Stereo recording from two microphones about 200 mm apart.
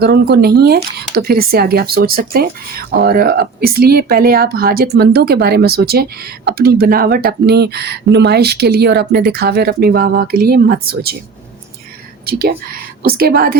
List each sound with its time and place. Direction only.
0.0 s speech: 50° right (ahead or behind)
13.0 s speech: 50° right (ahead or behind)